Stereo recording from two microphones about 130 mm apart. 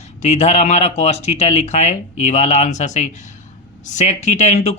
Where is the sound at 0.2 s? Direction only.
60° left (ahead or behind).